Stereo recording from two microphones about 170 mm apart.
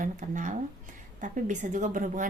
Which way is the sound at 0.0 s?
50° right (ahead or behind).